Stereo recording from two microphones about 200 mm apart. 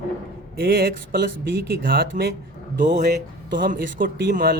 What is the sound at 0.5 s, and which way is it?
Speech, 50° right (ahead or behind).